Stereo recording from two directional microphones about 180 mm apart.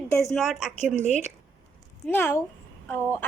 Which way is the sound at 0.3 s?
Centre (ahead or behind).